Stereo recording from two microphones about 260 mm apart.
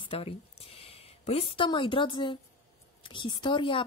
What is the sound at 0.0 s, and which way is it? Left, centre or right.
A woman's voice, left.